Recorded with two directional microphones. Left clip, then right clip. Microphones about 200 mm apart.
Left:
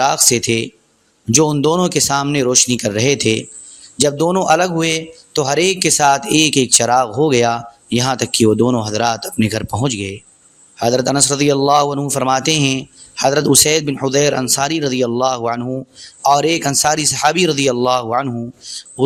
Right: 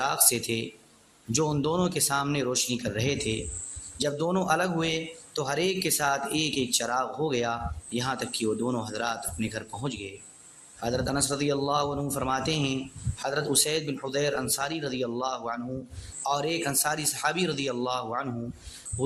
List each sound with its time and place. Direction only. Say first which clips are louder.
0.0 s a man's voice: left 13 dB; 35° left (ahead or behind)